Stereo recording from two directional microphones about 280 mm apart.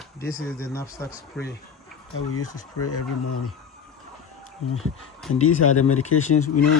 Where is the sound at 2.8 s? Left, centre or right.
Left.